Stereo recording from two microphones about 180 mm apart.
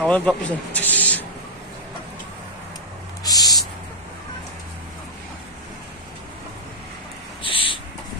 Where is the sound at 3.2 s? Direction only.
20° left (ahead or behind).